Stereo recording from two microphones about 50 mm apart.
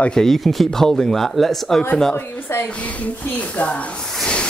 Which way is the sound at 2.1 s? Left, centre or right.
Left.